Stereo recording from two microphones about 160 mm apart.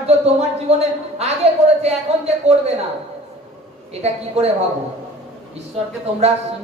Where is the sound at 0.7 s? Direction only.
40° right (ahead or behind).